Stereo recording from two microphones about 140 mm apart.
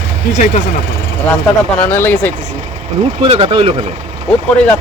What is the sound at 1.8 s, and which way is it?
Speech, 15° left (ahead or behind).